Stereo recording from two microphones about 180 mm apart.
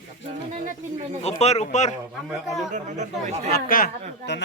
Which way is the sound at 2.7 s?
40° right (ahead or behind).